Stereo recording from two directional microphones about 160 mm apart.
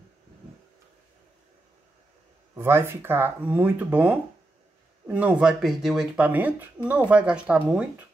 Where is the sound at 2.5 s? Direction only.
15° right (ahead or behind).